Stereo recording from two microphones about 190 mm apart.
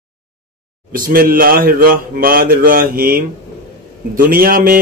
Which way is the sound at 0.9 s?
50° right (ahead or behind).